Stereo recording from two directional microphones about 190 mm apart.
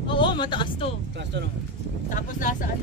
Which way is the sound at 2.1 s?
45° left (ahead or behind).